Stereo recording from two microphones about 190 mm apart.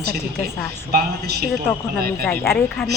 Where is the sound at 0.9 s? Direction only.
55° right (ahead or behind).